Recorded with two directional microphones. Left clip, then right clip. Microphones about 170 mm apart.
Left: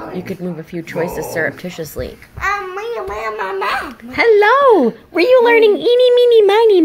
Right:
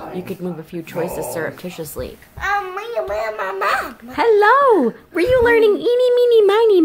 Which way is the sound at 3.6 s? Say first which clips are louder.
Right 2 dB; 20° right (ahead or behind).